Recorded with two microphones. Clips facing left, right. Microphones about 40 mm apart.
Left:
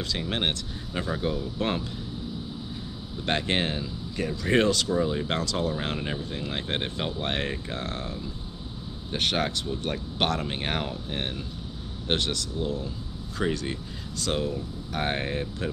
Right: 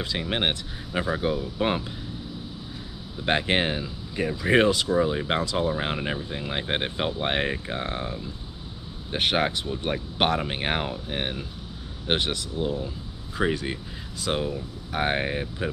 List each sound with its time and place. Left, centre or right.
0.0 s speech: centre
3.3 s speech: centre